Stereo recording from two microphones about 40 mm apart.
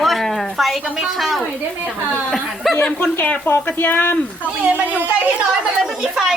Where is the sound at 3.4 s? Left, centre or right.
Left.